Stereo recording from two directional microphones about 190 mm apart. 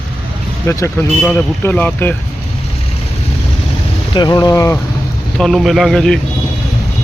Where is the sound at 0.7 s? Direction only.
10° left (ahead or behind).